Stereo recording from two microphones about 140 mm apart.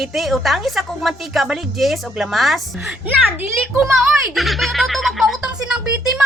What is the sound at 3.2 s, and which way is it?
Speech, 15° right (ahead or behind).